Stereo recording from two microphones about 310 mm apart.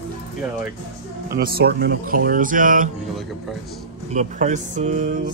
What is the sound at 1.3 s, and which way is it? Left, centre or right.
Speech, right.